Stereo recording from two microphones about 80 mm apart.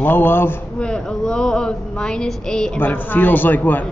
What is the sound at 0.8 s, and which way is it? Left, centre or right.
A woman's voice, centre.